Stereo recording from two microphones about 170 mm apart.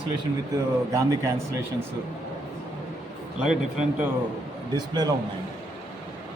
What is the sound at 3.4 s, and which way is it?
Speech, 5° right (ahead or behind).